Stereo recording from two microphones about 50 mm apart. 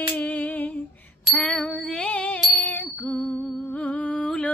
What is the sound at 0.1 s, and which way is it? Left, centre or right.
Humming, left.